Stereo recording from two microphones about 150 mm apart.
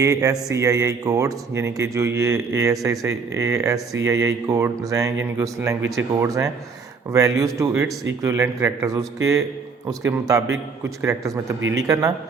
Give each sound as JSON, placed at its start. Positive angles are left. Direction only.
{"t": 0.0, "sound": "speech", "side_deg": -20}